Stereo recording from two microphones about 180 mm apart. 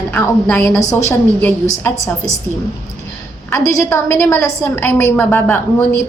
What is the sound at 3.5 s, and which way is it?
A woman's voice, 15° left (ahead or behind).